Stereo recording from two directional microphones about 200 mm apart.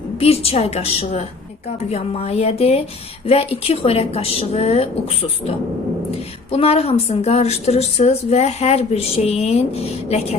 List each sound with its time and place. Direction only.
0.2 s a woman's voice: 30° left (ahead or behind)
6.5 s a woman's voice: 30° left (ahead or behind)